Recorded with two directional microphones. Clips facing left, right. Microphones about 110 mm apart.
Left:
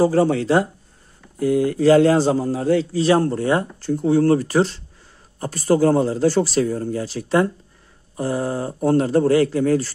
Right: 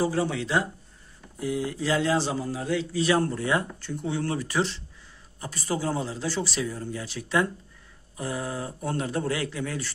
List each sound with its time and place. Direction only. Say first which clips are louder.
0.0 s speech: left 9 dB; 45° left (ahead or behind)
1.4 s speech: left 12 dB; 55° left (ahead or behind); by 4.8 s 40° left (ahead or behind)
5.4 s speech: left 12 dB; 50° left (ahead or behind)